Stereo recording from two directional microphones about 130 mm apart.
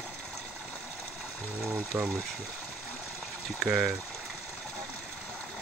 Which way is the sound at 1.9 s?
20° right (ahead or behind).